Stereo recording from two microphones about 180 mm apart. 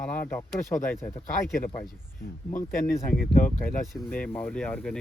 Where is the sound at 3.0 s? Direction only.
55° left (ahead or behind).